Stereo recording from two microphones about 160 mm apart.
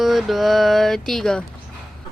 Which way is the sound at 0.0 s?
Centre (ahead or behind).